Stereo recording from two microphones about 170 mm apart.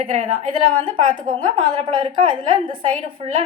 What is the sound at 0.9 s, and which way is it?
A woman's voice, 30° right (ahead or behind).